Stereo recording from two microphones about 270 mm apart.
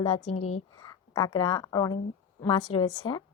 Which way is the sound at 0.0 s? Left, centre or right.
Left.